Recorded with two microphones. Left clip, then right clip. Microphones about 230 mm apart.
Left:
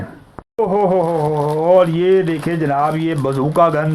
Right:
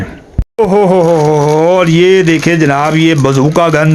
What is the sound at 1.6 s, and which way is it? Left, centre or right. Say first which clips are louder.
Speech: even; right.